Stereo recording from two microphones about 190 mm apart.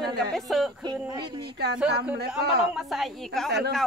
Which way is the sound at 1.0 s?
20° right (ahead or behind).